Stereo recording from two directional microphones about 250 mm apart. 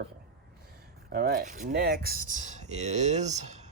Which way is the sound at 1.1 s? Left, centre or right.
Right.